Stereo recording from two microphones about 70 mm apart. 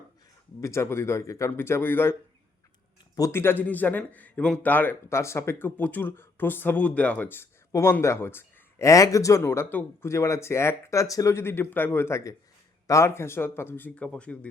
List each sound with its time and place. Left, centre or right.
0.6 s speech: left
1.5 s speech: left
3.3 s speech: left
5.0 s speech: left
8.0 s speech: left
8.8 s speech: left
9.4 s speech: left
10.1 s speech: left
11.3 s speech: left
14.0 s speech: centre